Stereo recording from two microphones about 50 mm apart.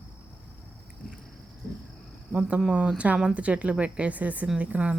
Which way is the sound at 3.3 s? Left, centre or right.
Right.